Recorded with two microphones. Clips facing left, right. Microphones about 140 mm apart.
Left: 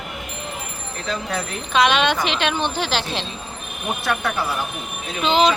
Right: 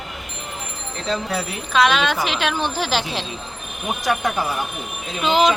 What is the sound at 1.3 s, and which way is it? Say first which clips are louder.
A woman's voice: right 1 dB; 5° right (ahead or behind).